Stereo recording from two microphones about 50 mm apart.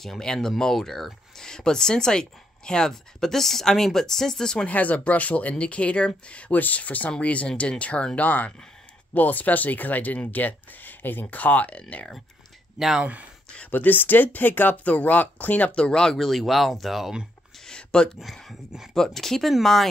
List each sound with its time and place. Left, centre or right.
0.0 s speech: centre
4.6 s speech: left
12.7 s speech: centre
13.0 s speech: right
13.7 s speech: left
15.8 s speech: centre
16.2 s speech: centre
17.6 s a sound: centre
18.2 s speech: centre